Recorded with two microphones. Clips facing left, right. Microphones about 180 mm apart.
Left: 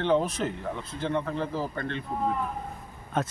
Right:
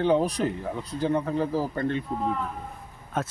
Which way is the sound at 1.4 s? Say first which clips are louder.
Right 4 dB; 40° right (ahead or behind).